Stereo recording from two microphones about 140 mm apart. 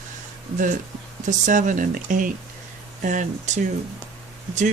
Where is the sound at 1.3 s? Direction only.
65° right (ahead or behind).